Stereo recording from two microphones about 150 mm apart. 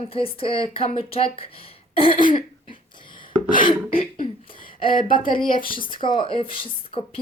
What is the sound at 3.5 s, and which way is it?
Speech, 35° left (ahead or behind).